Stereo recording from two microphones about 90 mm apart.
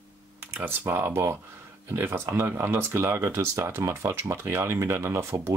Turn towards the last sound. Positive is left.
turn(degrees=-30)  # may be behind; listen again after turning